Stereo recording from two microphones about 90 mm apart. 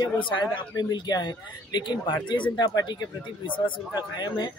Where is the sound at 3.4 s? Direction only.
65° left (ahead or behind).